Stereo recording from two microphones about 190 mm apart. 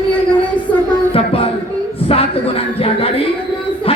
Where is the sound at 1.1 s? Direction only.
30° left (ahead or behind).